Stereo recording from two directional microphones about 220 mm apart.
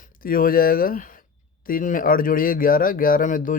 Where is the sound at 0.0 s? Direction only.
40° left (ahead or behind).